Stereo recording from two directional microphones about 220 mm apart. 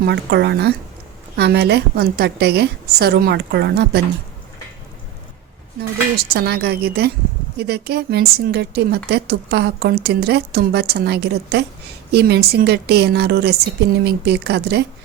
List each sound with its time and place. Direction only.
0.0 s a woman's voice: 50° right (ahead or behind)
6.1 s a woman's voice: 45° right (ahead or behind)